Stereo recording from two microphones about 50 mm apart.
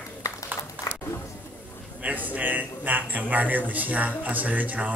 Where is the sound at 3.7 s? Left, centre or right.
Right.